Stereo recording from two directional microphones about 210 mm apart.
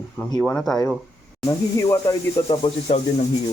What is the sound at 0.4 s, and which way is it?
Speech, centre (ahead or behind).